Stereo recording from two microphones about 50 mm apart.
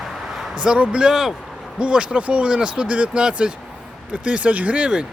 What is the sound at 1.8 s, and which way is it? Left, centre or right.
Speech, right.